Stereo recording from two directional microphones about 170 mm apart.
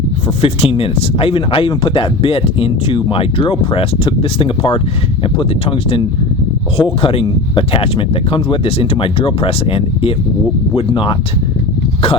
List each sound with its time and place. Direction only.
0.4 s speech: 35° left (ahead or behind)